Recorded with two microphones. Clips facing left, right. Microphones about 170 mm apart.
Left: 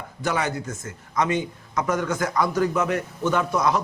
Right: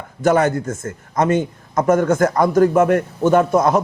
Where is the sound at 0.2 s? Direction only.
50° right (ahead or behind).